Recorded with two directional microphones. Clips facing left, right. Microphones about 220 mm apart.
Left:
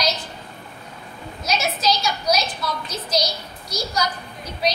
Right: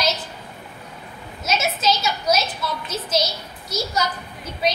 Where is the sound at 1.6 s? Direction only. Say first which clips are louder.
Even; 5° right (ahead or behind).